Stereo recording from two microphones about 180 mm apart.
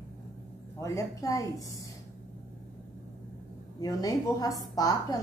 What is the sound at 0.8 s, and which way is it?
A woman's voice, 15° left (ahead or behind).